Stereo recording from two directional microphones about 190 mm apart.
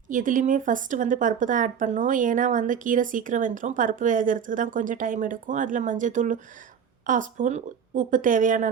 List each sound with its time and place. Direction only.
0.1 s speech: 45° right (ahead or behind)